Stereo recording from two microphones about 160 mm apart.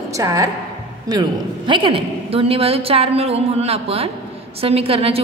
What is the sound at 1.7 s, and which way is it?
A woman's voice, 35° right (ahead or behind).